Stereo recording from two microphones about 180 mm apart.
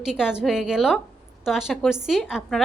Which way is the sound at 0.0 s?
5° right (ahead or behind).